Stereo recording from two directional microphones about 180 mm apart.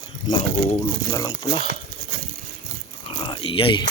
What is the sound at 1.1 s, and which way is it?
Speech, 20° left (ahead or behind).